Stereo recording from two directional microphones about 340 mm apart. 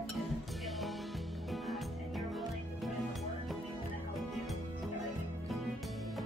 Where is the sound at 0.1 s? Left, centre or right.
Centre.